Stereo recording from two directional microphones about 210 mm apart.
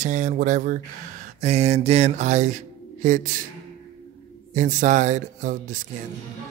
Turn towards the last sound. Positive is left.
turn(degrees=-35)  # may be behind; listen again after turning